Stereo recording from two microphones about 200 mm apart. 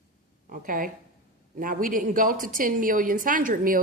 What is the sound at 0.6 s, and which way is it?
A woman's voice, 45° right (ahead or behind).